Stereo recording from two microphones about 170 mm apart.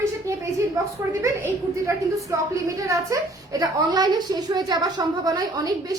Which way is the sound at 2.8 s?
20° right (ahead or behind).